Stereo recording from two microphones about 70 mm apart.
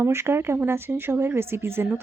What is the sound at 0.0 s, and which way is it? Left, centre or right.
Speech, right.